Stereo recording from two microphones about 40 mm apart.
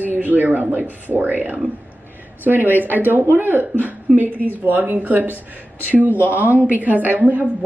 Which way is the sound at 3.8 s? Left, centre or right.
Right.